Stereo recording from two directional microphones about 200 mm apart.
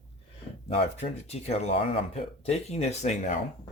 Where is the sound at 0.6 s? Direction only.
30° left (ahead or behind).